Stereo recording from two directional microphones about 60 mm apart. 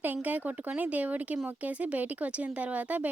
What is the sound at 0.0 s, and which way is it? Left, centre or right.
Speech, right.